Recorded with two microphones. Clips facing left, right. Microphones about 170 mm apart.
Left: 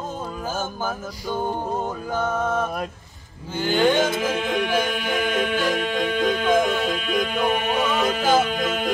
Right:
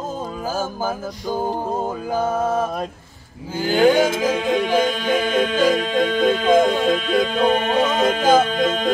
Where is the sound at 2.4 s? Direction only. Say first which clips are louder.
Right 3 dB; 30° right (ahead or behind).